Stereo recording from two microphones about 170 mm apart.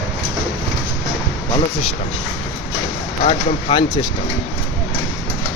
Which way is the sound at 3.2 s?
30° left (ahead or behind).